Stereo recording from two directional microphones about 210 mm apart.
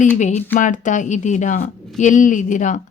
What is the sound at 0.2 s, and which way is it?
A woman's voice, 35° left (ahead or behind).